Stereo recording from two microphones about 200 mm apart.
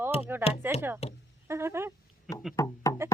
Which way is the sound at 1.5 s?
15° right (ahead or behind).